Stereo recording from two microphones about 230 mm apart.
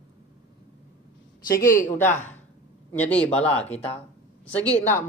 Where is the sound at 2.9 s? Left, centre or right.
Centre.